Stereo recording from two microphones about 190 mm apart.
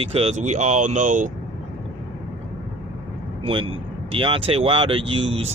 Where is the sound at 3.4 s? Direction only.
30° right (ahead or behind).